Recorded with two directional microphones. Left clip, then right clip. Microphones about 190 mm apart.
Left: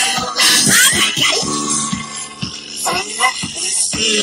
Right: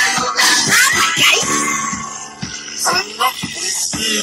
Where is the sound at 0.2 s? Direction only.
35° left (ahead or behind).